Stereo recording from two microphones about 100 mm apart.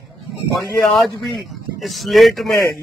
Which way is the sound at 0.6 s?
Centre (ahead or behind).